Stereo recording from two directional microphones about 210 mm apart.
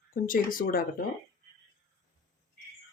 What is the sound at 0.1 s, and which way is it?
Speech, 40° left (ahead or behind).